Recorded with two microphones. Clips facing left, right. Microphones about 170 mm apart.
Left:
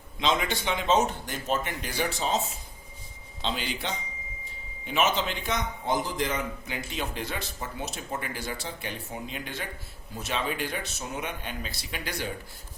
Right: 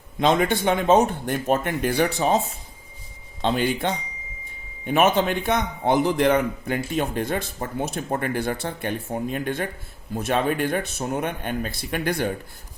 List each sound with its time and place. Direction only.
0.2 s a man's voice: 55° right (ahead or behind)
3.4 s a man's voice: 55° right (ahead or behind)